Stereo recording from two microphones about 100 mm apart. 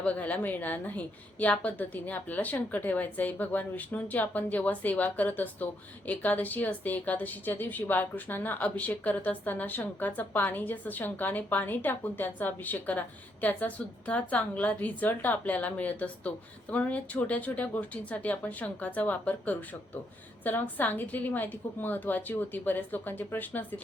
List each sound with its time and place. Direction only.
0.0 s a woman's voice: 15° left (ahead or behind)